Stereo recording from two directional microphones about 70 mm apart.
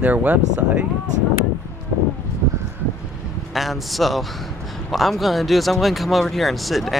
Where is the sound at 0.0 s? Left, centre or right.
Right.